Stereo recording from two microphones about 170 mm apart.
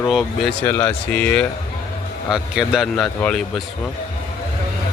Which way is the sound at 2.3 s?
5° right (ahead or behind).